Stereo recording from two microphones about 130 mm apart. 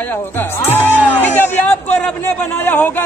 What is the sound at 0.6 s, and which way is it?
Speech, 15° left (ahead or behind).